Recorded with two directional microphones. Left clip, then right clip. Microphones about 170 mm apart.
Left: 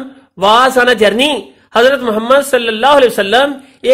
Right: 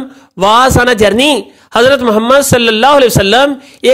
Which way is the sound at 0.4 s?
40° right (ahead or behind).